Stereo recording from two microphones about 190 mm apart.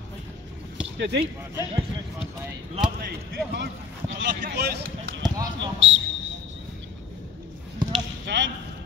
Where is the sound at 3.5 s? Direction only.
80° right.